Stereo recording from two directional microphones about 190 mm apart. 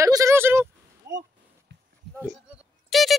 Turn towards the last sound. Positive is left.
turn(degrees=0)  # may be behind; listen again after turning